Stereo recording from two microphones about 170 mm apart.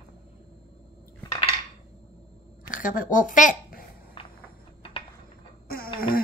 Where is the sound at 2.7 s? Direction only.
50° left (ahead or behind).